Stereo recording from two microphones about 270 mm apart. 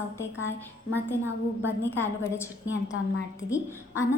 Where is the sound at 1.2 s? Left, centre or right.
Centre.